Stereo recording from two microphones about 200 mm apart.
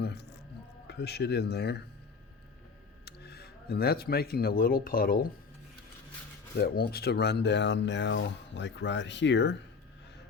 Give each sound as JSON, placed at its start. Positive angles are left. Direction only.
{"t": 0.0, "sound": "music", "side_deg": 55}
{"t": 0.9, "sound": "speech", "side_deg": 55}
{"t": 3.1, "sound": "speech", "side_deg": 55}
{"t": 6.6, "sound": "speech", "side_deg": 50}